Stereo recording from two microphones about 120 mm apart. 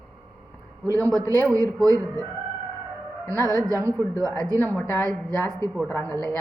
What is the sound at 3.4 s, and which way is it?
Speech, 25° right (ahead or behind).